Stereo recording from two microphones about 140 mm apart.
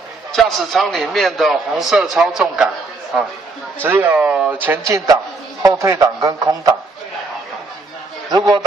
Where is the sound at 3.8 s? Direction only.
15° right (ahead or behind).